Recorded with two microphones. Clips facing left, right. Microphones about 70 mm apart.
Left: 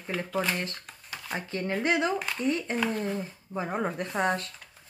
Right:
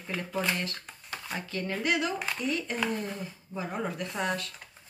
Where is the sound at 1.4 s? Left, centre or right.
Left.